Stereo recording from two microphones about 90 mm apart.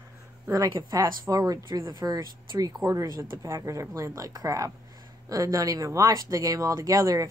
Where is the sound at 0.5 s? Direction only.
40° right (ahead or behind).